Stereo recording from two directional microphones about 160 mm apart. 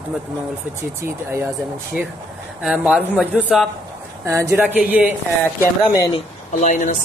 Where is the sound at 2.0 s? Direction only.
10° right (ahead or behind).